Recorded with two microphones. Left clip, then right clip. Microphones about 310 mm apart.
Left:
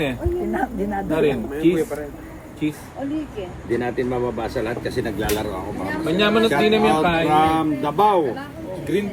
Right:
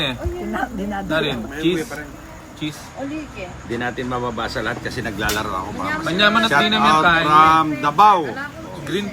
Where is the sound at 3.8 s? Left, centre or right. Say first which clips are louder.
Right 2 dB; right.